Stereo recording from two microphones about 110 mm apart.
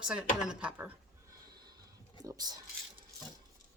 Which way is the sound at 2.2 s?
35° right (ahead or behind).